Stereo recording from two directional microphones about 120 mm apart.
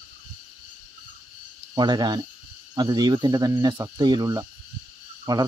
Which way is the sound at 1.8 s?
35° right (ahead or behind).